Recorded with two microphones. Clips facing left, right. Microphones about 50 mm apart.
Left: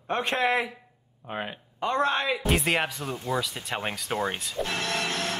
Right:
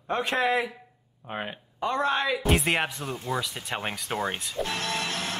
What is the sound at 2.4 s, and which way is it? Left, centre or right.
Speech, centre.